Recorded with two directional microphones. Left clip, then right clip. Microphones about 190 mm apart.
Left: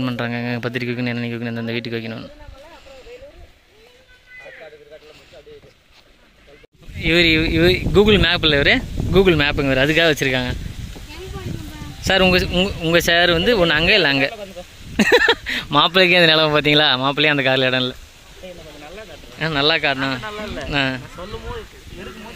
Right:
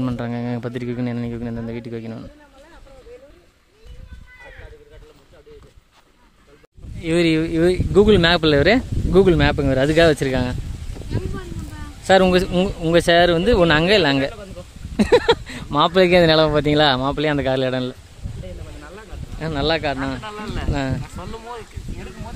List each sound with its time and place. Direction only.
0.0 s speech: 10° right (ahead or behind)
7.0 s speech: 15° right (ahead or behind)
12.1 s speech: 15° right (ahead or behind)
19.3 s speech: 5° right (ahead or behind)
20.2 s speech: 25° right (ahead or behind)
20.7 s speech: 10° right (ahead or behind)